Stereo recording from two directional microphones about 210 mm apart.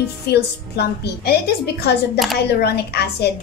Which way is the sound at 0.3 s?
50° left (ahead or behind).